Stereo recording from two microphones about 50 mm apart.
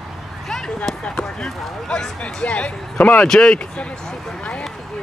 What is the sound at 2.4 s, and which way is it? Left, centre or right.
Speech, left.